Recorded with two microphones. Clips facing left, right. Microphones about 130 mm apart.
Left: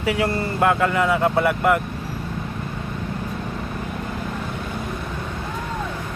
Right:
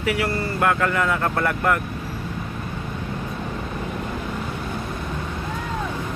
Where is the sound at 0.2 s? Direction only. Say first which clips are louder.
Left 2 dB; 20° left (ahead or behind).